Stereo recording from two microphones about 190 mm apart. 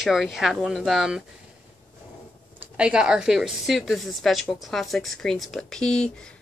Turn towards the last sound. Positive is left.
turn(degrees=5)  # may be behind; listen again after turning